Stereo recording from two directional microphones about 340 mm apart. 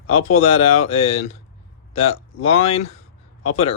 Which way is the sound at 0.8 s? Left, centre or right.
Centre.